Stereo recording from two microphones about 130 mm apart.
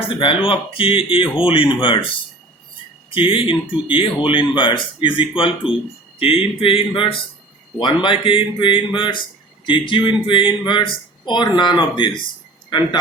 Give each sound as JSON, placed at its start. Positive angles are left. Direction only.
{"t": 0.2, "sound": "speech", "side_deg": 40}
{"t": 3.1, "sound": "speech", "side_deg": 45}